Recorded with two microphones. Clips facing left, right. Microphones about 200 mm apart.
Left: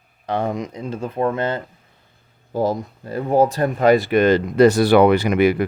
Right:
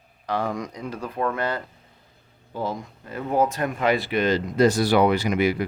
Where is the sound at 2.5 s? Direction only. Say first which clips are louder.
Left 8 dB; 40° left (ahead or behind); by 5.7 s 60° left (ahead or behind).